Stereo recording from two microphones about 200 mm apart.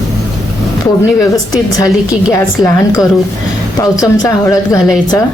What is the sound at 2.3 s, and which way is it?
A woman's voice, 15° left (ahead or behind).